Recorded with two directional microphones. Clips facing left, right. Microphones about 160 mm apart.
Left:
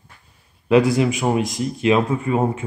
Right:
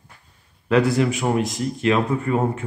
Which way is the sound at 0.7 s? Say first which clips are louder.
Left 3 dB; 15° left (ahead or behind).